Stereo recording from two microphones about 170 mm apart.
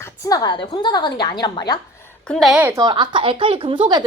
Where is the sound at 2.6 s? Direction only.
20° right (ahead or behind).